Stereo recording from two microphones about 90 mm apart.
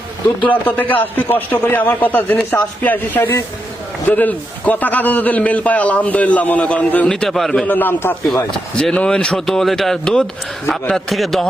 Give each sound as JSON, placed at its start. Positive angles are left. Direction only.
{"t": 0.4, "sound": "a man's voice", "side_deg": 20}
{"t": 7.1, "sound": "a man's voice", "side_deg": 5}
{"t": 7.6, "sound": "speech", "side_deg": 20}
{"t": 8.4, "sound": "a man's voice", "side_deg": 10}